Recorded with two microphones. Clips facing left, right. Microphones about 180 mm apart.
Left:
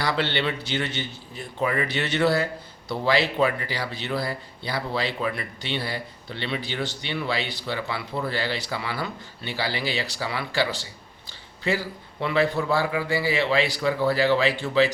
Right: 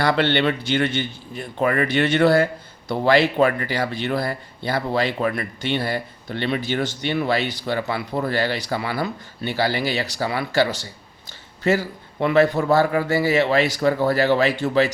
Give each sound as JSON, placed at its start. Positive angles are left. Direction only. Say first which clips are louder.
{"t": 0.0, "sound": "a man's voice", "louder": "right 6 dB", "side_deg": -55}